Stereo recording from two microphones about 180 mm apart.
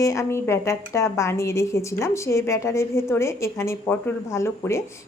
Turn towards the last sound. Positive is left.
turn(degrees=15)  # may be behind; listen again after turning